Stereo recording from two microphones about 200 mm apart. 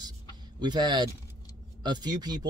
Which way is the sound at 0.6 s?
20° right (ahead or behind).